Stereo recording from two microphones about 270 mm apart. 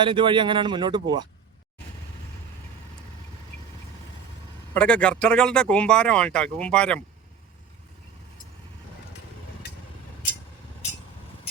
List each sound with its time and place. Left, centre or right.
0.0 s speech: centre
4.7 s speech: centre